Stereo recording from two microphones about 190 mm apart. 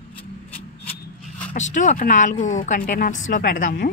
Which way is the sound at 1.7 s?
40° left (ahead or behind).